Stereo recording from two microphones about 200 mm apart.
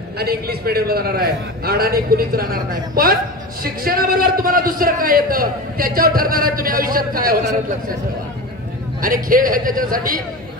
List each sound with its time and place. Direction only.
0.2 s a man's voice: 50° right (ahead or behind)
9.0 s a man's voice: 45° right (ahead or behind)